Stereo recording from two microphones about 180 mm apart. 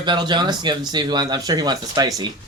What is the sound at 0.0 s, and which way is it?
Speech, 25° right (ahead or behind).